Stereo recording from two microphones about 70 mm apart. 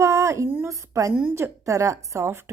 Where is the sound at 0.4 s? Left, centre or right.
Right.